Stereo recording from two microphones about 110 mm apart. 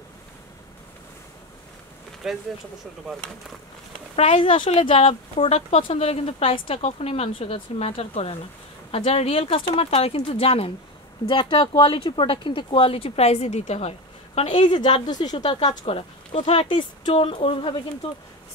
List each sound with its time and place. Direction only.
2.2 s speech: 5° right (ahead or behind)
4.2 s speech: 55° left (ahead or behind)
11.2 s speech: 50° left (ahead or behind); by 14.5 s 70° left (ahead or behind)
14.5 s a woman's voice: 45° left (ahead or behind)
15.8 s speech: 60° left (ahead or behind)